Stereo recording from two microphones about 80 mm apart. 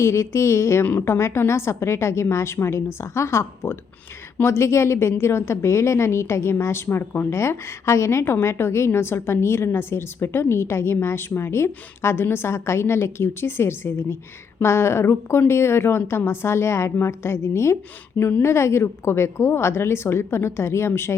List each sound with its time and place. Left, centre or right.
0.0 s a woman's voice: left